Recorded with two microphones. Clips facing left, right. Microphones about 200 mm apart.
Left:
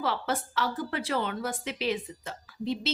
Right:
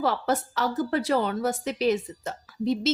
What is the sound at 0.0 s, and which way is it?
A woman's voice, 40° right (ahead or behind).